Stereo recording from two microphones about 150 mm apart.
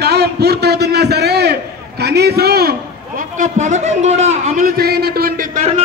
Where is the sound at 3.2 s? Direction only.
55° right (ahead or behind).